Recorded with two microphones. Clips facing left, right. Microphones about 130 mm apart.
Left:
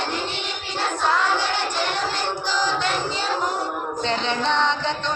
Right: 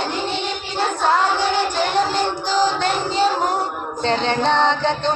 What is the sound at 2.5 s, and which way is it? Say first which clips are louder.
Music: right 5 dB; 45° right (ahead or behind).